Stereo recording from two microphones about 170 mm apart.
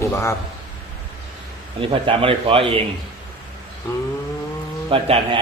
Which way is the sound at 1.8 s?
30° right (ahead or behind).